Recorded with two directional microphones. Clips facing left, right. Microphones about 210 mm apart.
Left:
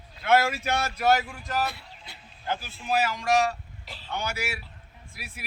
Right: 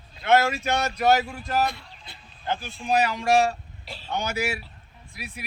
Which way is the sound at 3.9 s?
20° right (ahead or behind).